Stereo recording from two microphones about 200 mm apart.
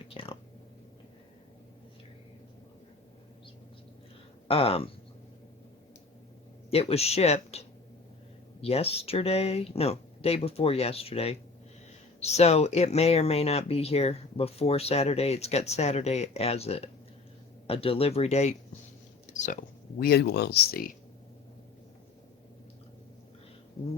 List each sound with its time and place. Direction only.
0.1 s a sound: 25° left (ahead or behind)
4.4 s speech: 30° left (ahead or behind)
6.7 s speech: 30° left (ahead or behind)
8.6 s speech: 30° left (ahead or behind)
19.3 s a sound: 35° left (ahead or behind)
20.0 s speech: 50° left (ahead or behind)